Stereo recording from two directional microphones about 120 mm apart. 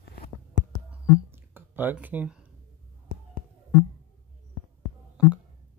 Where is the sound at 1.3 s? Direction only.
20° right (ahead or behind).